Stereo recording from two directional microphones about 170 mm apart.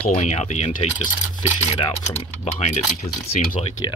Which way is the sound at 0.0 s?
40° left (ahead or behind).